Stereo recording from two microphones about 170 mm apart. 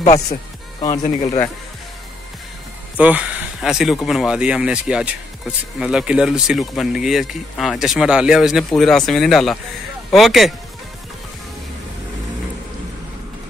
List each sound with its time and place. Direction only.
0.0 s music: 40° left (ahead or behind)
1.0 s a man's voice: 40° left (ahead or behind)
3.0 s speech: 10° right (ahead or behind)